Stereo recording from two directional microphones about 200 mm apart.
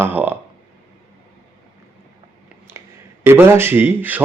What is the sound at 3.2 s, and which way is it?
Speech, 10° right (ahead or behind).